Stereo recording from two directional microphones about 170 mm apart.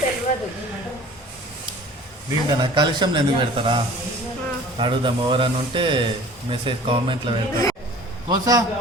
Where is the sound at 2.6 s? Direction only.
25° right (ahead or behind).